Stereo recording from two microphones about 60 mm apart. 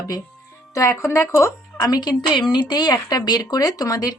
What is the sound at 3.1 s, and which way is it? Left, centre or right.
Speech, left.